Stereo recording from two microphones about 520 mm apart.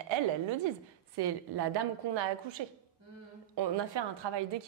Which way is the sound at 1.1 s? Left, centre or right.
Right.